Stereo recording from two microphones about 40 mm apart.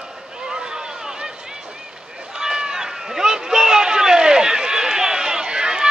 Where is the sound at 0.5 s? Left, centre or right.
Centre.